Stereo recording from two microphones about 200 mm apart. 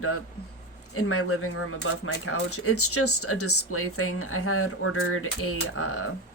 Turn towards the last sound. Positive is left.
turn(degrees=90)